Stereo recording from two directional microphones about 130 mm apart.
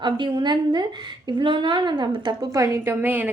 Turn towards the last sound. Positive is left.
turn(degrees=-15)  # may be behind; listen again after turning